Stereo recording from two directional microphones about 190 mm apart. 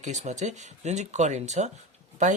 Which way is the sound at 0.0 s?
40° right (ahead or behind).